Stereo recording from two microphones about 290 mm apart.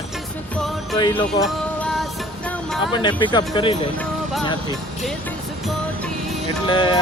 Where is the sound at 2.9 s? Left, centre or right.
Centre.